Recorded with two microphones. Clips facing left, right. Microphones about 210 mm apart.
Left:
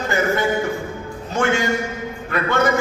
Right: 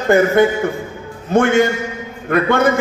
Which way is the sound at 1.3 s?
55° right (ahead or behind).